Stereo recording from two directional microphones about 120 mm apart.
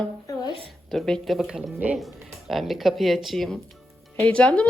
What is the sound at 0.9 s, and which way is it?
Speech, 5° left (ahead or behind).